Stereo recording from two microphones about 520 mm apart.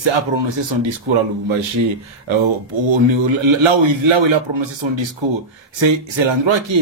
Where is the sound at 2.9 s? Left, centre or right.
Right.